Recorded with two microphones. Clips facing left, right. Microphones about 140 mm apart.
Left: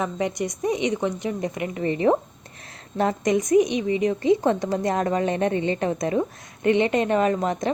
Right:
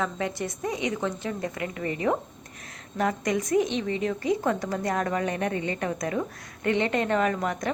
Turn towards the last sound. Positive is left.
turn(degrees=25)  # may be behind; listen again after turning